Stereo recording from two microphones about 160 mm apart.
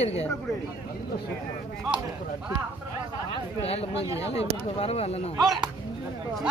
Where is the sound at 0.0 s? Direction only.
45° left (ahead or behind).